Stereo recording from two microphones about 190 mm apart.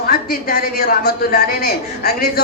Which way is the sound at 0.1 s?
50° left (ahead or behind).